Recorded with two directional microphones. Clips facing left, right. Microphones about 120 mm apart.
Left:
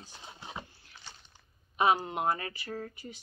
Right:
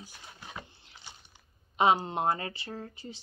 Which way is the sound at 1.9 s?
30° right (ahead or behind).